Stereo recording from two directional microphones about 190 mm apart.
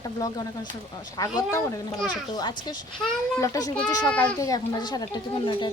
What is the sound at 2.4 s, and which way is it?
Speech, 20° left (ahead or behind).